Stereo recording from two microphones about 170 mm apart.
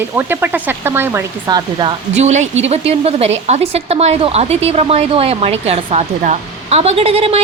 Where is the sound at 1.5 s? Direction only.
25° right (ahead or behind).